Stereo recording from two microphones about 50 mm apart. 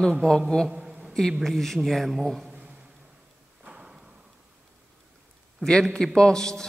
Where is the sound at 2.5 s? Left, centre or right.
Right.